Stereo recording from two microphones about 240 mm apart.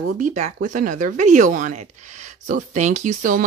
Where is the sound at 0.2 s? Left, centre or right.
Right.